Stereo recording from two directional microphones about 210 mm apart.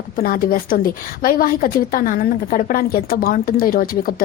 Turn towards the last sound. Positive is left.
turn(degrees=45)  # may be behind; listen again after turning